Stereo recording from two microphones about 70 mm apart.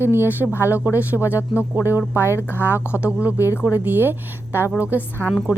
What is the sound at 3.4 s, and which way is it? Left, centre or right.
Speech, left.